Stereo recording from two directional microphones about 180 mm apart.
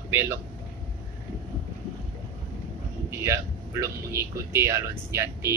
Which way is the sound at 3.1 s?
15° right (ahead or behind).